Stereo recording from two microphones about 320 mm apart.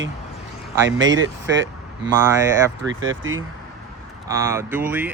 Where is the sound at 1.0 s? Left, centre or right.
Right.